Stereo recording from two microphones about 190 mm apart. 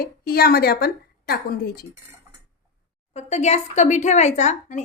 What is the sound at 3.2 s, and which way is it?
A woman's voice, 35° left (ahead or behind).